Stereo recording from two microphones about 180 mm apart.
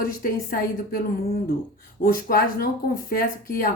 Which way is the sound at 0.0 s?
55° left (ahead or behind).